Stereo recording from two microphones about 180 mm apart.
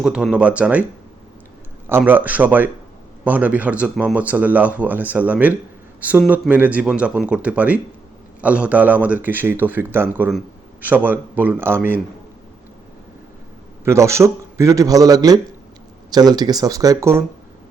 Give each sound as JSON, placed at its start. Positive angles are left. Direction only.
{"t": 0.0, "sound": "speech", "side_deg": -5}
{"t": 1.9, "sound": "speech", "side_deg": -10}
{"t": 13.8, "sound": "speech", "side_deg": -15}